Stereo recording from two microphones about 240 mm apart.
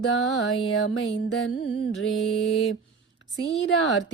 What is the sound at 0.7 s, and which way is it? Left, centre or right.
Speech, left.